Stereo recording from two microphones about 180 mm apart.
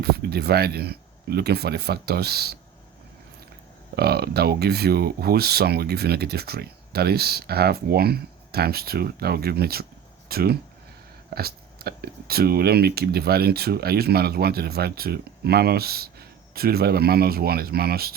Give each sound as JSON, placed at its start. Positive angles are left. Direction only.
{"t": 0.0, "sound": "speech", "side_deg": -60}
{"t": 3.9, "sound": "speech", "side_deg": -60}